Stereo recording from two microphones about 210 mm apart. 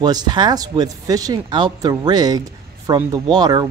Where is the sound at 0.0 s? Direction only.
20° right (ahead or behind).